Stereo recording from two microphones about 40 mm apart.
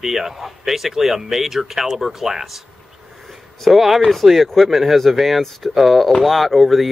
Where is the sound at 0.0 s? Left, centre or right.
Centre.